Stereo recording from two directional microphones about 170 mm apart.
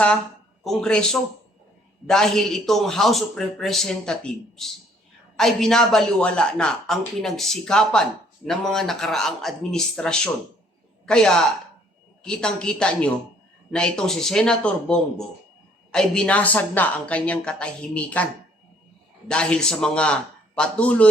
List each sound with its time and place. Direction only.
0.6 s a man's voice: 5° left (ahead or behind)
19.3 s a man's voice: 5° left (ahead or behind)